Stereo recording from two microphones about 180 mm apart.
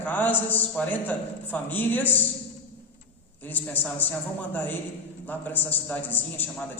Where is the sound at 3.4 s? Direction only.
10° left (ahead or behind).